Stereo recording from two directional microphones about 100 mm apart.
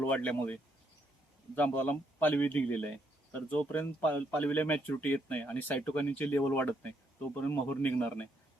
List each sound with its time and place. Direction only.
0.0 s speech: 15° left (ahead or behind)